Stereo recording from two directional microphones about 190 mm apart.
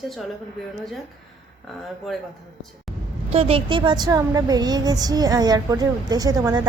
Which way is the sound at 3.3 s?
30° right (ahead or behind).